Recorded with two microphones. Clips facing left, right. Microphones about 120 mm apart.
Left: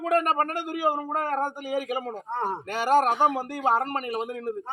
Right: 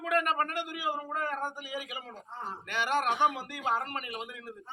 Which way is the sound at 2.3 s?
65° left (ahead or behind).